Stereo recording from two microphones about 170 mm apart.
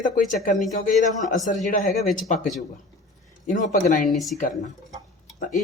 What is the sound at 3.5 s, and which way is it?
Speech, 50° left (ahead or behind).